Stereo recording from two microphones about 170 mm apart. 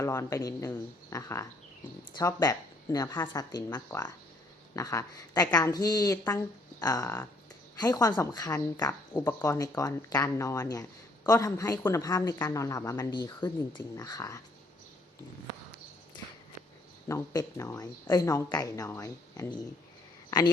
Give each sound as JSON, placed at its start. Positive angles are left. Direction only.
{"t": 0.0, "sound": "speech", "side_deg": 20}
{"t": 17.1, "sound": "speech", "side_deg": 20}